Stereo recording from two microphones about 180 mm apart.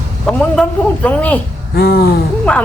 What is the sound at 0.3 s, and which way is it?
A man's voice, 10° left (ahead or behind).